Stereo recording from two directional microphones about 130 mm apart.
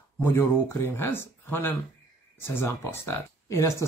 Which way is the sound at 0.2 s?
15° left (ahead or behind).